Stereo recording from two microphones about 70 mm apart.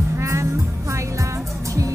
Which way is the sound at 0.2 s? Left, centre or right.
Right.